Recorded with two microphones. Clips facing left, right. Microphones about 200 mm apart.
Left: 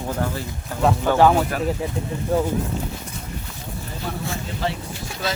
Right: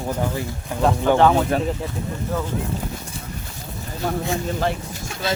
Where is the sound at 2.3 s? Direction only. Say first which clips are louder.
Left 6 dB; 30° left (ahead or behind).